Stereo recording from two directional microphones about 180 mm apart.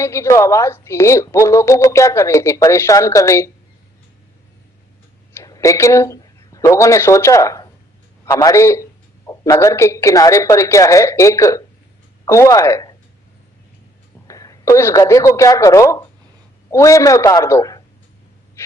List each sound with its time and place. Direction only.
0.0 s a woman's voice: 15° left (ahead or behind)
5.3 s a woman's voice: 15° left (ahead or behind)
14.3 s a woman's voice: 20° left (ahead or behind)